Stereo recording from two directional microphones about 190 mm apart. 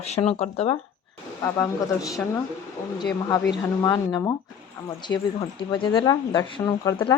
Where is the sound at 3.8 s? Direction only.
20° left (ahead or behind).